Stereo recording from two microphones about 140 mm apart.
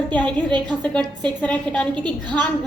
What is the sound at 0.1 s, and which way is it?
A woman's voice, 10° left (ahead or behind).